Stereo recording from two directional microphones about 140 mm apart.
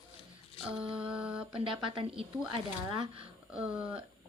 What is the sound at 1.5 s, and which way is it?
Speech, 40° right (ahead or behind).